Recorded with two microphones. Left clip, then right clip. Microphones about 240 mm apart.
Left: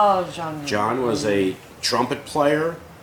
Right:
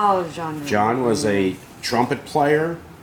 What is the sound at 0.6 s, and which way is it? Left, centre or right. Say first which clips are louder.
Speech: right 3 dB; right.